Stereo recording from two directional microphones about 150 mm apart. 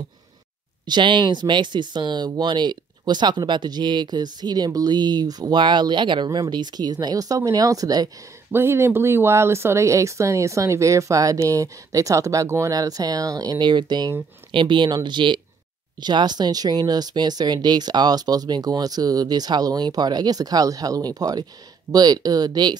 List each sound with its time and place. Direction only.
0.8 s speech: 30° right (ahead or behind)